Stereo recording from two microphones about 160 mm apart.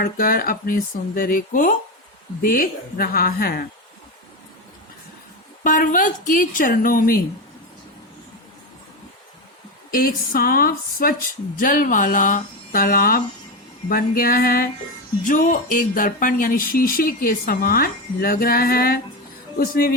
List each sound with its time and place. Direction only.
0.0 s speech: 65° left (ahead or behind)
5.6 s speech: 55° left (ahead or behind)
9.9 s speech: 65° left (ahead or behind)